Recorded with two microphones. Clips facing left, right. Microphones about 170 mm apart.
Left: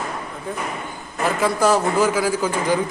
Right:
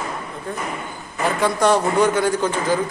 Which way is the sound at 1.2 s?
5° left (ahead or behind).